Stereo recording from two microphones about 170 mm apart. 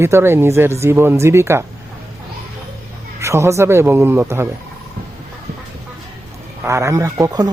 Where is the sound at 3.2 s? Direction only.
15° right (ahead or behind).